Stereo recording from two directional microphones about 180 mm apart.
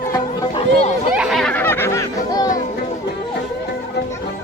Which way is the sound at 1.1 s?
5° right (ahead or behind).